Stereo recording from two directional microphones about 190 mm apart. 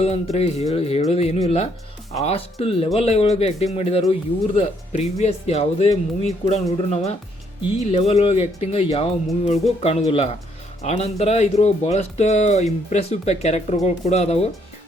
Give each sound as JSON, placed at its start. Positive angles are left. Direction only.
{"t": 0.0, "sound": "speech", "side_deg": 35}
{"t": 7.8, "sound": "speech", "side_deg": 35}